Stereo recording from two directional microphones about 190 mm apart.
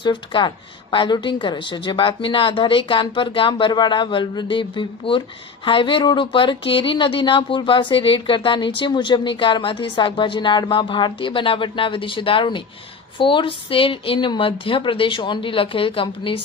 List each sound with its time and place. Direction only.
0.0 s a woman's voice: 25° left (ahead or behind)